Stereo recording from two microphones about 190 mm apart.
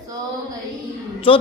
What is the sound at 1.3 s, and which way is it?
Speech, 30° left (ahead or behind).